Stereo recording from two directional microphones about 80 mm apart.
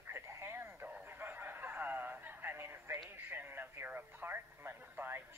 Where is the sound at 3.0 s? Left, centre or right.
Right.